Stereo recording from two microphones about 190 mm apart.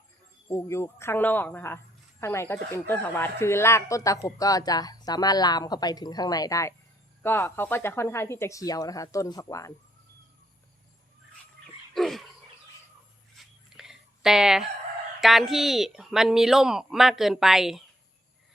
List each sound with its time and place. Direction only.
0.4 s speech: 15° left (ahead or behind)
11.9 s a sound: centre (ahead or behind)
13.3 s fowl: centre (ahead or behind)
15.2 s a woman's voice: centre (ahead or behind)